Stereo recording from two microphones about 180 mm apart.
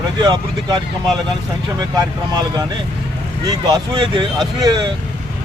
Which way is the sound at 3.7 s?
25° right (ahead or behind).